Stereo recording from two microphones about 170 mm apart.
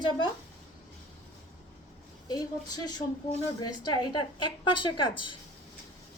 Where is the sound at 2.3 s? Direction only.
20° left (ahead or behind).